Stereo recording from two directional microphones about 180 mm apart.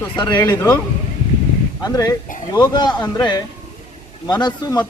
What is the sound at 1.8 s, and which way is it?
A man's voice, 20° left (ahead or behind).